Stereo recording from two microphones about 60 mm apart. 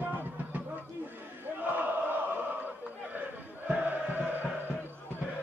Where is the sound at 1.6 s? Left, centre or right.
Right.